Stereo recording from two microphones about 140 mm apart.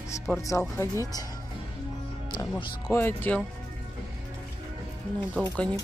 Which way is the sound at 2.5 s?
15° left (ahead or behind).